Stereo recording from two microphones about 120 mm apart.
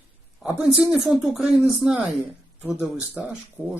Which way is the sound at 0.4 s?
10° right (ahead or behind).